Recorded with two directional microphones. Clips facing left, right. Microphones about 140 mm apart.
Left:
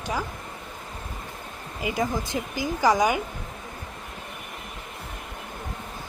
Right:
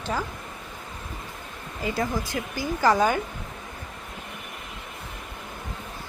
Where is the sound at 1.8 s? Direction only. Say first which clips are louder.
Left 1 dB; 15° left (ahead or behind).